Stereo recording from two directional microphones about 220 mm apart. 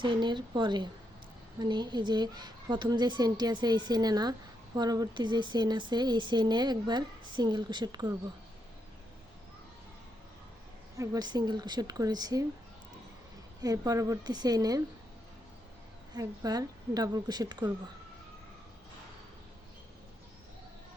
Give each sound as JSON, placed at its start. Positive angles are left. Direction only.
{"t": 0.0, "sound": "a woman's voice", "side_deg": -20}
{"t": 10.9, "sound": "a woman's voice", "side_deg": -15}
{"t": 13.6, "sound": "a woman's voice", "side_deg": -15}
{"t": 16.1, "sound": "a woman's voice", "side_deg": -15}